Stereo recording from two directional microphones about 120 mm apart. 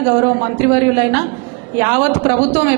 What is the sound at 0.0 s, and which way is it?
A woman's voice, 20° right (ahead or behind).